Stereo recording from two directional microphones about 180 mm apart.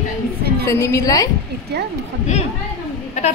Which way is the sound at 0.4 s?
60° right (ahead or behind).